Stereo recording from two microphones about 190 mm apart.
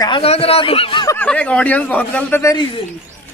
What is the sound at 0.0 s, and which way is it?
Speech, 30° left (ahead or behind).